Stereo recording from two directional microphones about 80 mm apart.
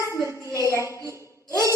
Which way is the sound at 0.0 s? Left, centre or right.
Left.